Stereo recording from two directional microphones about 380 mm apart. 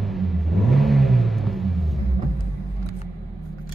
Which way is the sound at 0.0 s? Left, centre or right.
Centre.